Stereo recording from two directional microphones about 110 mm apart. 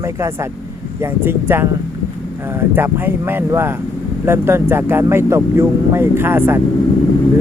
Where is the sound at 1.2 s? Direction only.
20° right (ahead or behind).